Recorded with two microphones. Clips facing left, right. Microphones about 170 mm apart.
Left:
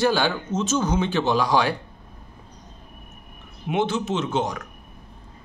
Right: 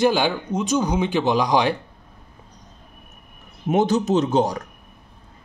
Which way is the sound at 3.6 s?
40° right (ahead or behind).